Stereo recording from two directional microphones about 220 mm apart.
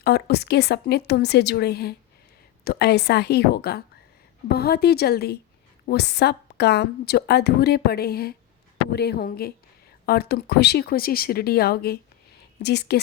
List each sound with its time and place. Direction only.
0.0 s a woman's voice: 45° left (ahead or behind)